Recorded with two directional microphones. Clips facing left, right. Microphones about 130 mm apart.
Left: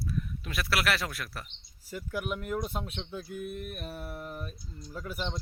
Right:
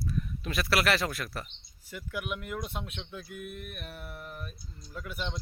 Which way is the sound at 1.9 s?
35° left (ahead or behind).